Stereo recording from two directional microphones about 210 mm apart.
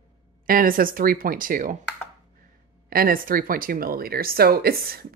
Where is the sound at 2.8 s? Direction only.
45° right (ahead or behind).